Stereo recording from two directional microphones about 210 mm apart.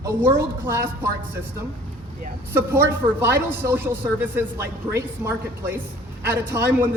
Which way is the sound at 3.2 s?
10° right (ahead or behind).